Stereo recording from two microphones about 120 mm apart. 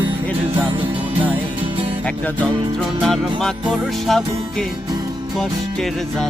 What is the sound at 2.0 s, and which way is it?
Music, 15° left (ahead or behind).